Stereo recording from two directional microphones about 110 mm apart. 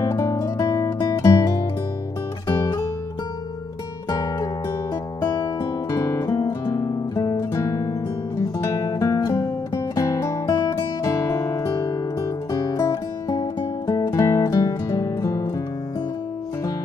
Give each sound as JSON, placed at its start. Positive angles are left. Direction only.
{"t": 0.0, "sound": "guitar", "side_deg": 30}
{"t": 2.6, "sound": "music", "side_deg": 30}
{"t": 4.1, "sound": "music", "side_deg": 35}
{"t": 5.2, "sound": "guitar", "side_deg": 35}
{"t": 8.4, "sound": "music", "side_deg": 30}